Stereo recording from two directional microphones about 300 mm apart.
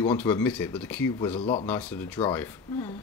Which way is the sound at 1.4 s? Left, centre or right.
Centre.